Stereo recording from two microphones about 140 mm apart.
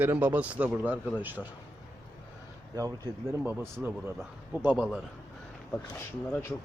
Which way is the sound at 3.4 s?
15° right (ahead or behind).